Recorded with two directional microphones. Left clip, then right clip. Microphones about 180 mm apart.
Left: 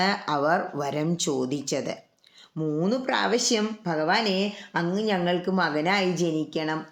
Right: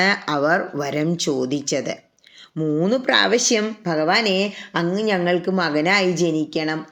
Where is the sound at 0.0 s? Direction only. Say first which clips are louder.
Right 5 dB; 5° right (ahead or behind).